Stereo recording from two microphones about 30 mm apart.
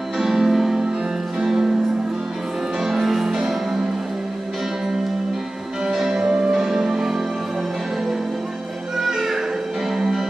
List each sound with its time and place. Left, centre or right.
0.2 s music: centre
2.8 s music: centre
5.9 s music: centre
8.9 s music: centre